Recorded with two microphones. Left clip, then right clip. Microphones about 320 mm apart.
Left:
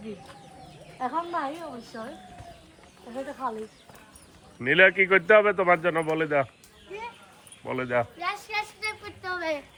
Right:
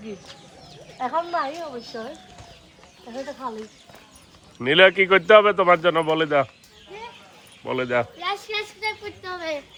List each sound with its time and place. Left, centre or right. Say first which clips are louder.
0.9 s speech: right 5 dB; right
1.9 s speech: right 4 dB; right
4.6 s a man's voice: right 4 dB; centre
7.6 s speech: right 4 dB; centre